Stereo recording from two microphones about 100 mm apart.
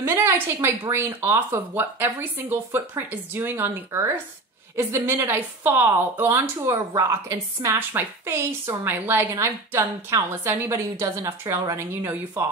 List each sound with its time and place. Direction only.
0.0 s a woman's voice: 25° right (ahead or behind)